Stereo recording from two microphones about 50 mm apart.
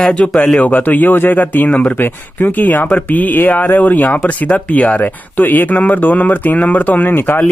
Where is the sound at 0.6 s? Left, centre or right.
Left.